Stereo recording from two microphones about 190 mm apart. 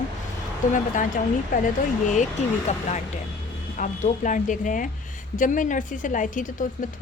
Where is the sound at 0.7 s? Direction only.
45° left (ahead or behind).